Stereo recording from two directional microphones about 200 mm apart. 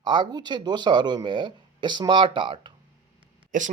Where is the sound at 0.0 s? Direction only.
25° right (ahead or behind).